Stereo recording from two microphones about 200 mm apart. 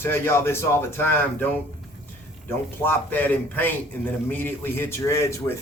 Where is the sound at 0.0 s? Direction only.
10° left (ahead or behind).